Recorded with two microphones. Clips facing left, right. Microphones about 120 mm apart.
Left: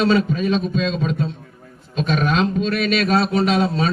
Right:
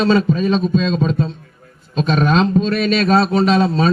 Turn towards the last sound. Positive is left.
turn(degrees=-35)  # may be behind; listen again after turning